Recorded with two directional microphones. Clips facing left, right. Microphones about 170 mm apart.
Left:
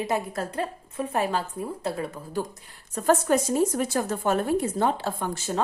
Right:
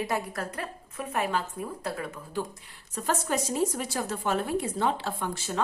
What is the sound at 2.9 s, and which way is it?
A woman's voice, 50° left (ahead or behind).